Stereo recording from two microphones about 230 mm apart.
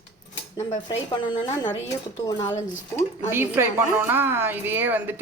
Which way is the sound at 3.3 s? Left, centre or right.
Centre.